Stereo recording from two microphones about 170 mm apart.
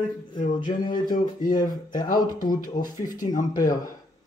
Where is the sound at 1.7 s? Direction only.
50° left (ahead or behind).